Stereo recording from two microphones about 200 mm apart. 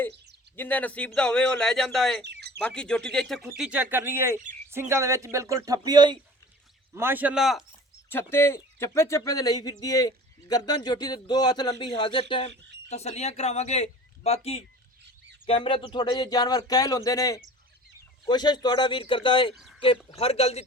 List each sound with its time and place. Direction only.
0.5 s speech: 10° left (ahead or behind)
2.2 s bird: 55° right (ahead or behind)
2.6 s speech: 5° left (ahead or behind)
8.1 s speech: 10° left (ahead or behind)
19.5 s a sound: centre (ahead or behind)
20.1 s speech: 30° left (ahead or behind)